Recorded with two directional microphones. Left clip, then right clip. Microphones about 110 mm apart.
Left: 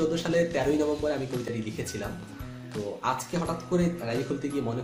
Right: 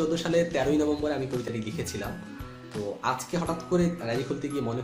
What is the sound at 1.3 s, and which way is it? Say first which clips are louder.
Speech: right 1 dB; centre (ahead or behind).